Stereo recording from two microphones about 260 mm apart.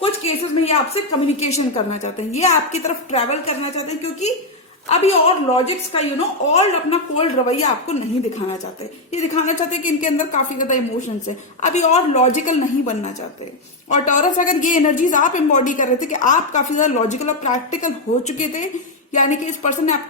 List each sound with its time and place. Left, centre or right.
0.0 s a woman's voice: left
9.1 s a woman's voice: left